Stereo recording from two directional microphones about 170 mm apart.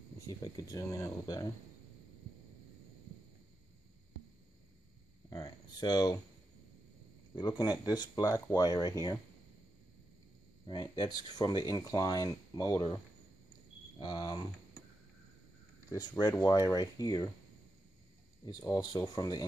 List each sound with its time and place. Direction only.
0.3 s speech: 20° left (ahead or behind)
5.3 s a sound: 20° left (ahead or behind)
7.6 s speech: 20° left (ahead or behind)
10.7 s speech: 25° left (ahead or behind)
15.9 s speech: 20° left (ahead or behind)
18.6 s speech: 20° left (ahead or behind)